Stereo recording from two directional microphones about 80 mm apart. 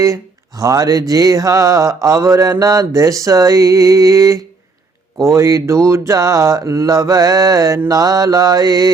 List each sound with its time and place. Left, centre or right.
0.0 s mantra: right
5.1 s a sound: right
7.9 s mantra: right